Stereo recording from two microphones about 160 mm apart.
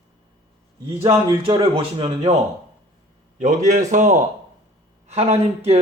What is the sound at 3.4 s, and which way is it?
A man's voice, 50° right (ahead or behind).